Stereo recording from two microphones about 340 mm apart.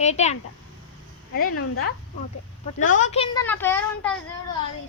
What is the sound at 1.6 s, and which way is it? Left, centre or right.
Speech, left.